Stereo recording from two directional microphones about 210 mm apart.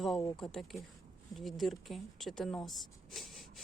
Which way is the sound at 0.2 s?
15° left (ahead or behind).